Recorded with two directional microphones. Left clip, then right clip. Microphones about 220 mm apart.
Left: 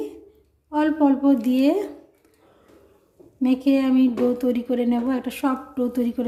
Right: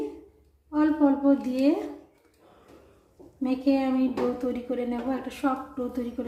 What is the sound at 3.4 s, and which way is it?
A woman's voice, 45° left (ahead or behind).